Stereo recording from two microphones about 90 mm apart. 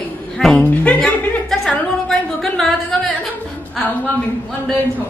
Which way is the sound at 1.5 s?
5° left (ahead or behind).